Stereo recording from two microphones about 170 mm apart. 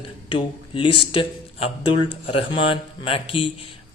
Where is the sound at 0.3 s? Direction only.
30° left (ahead or behind).